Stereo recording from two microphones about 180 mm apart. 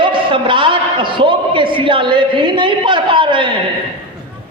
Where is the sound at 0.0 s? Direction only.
25° right (ahead or behind).